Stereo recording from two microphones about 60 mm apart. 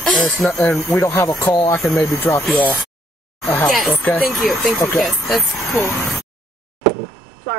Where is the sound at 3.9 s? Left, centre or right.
Left.